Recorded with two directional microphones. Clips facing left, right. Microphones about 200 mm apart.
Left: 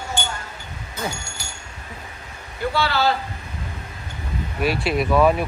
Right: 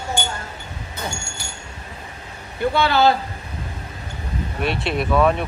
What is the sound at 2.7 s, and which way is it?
Speech, 20° right (ahead or behind).